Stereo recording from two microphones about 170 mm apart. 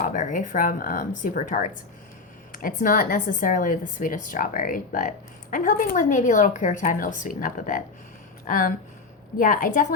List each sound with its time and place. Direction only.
0.0 s speech: 45° left (ahead or behind)